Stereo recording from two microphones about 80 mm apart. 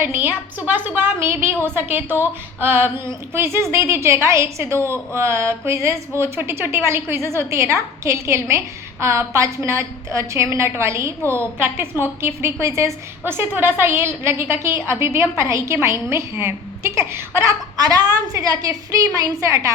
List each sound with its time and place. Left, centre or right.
0.0 s a woman's voice: right
13.2 s a woman's voice: right
17.7 s a woman's voice: right